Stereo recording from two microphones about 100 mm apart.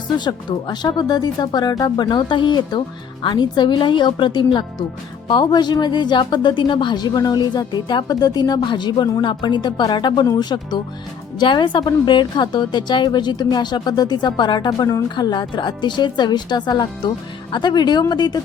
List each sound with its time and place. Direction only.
0.3 s speech: 45° left (ahead or behind)
14.7 s a woman's voice: 35° left (ahead or behind)
15.1 s speech: 45° left (ahead or behind)